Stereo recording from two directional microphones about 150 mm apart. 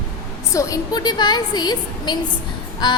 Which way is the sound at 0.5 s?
20° left (ahead or behind).